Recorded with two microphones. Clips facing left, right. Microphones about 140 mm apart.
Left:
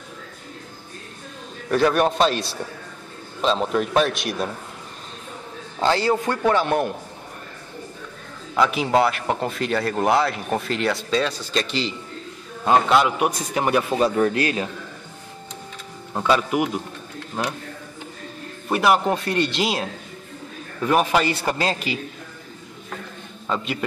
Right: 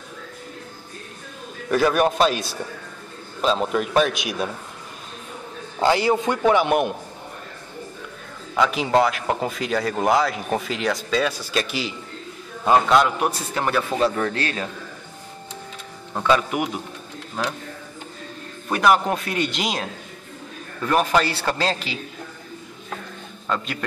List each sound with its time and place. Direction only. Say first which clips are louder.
1.7 s speech: even; 5° right (ahead or behind)
5.8 s a man's voice: right 1 dB; 15° right (ahead or behind)
8.5 s speech: even; centre (ahead or behind)
13.5 s speech: left 2 dB; 15° left (ahead or behind)
16.1 s speech: even; 10° left (ahead or behind)
16.4 s speech: left 3 dB; centre (ahead or behind)
18.7 s speech: even; 5° left (ahead or behind)
23.4 s a man's voice: left 1 dB; 5° left (ahead or behind)